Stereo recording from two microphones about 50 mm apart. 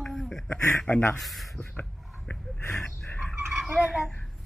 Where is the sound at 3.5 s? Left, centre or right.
Centre.